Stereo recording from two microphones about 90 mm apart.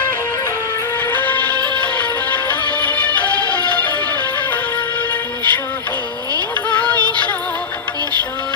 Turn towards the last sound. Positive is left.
turn(degrees=15)  # may be behind; listen again after turning